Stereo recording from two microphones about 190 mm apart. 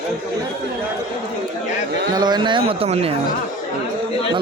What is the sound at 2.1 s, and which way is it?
Speech, 20° right (ahead or behind).